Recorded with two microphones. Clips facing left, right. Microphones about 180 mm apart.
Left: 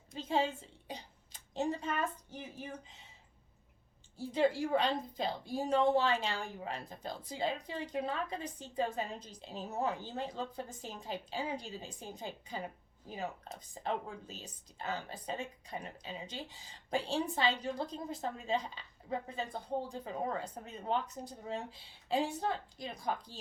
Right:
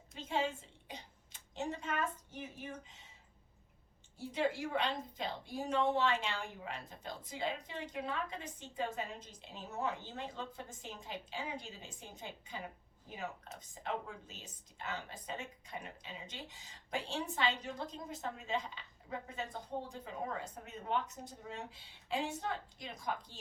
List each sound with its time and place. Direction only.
0.1 s a sound: 35° left (ahead or behind)
0.9 s throat clearing: 35° left (ahead or behind)
4.3 s a woman's voice: 35° left (ahead or behind)